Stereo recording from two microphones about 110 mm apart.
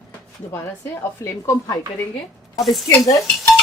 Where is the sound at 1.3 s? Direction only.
25° left (ahead or behind).